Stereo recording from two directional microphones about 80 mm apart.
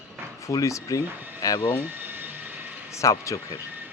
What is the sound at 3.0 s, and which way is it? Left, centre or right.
Speech, left.